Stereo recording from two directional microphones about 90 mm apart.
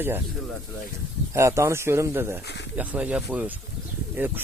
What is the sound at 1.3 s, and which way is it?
Speech, 35° right (ahead or behind).